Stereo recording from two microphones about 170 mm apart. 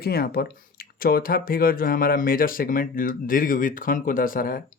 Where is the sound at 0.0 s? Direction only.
65° left (ahead or behind).